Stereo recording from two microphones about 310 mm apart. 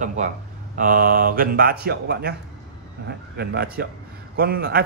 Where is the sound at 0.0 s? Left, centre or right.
Right.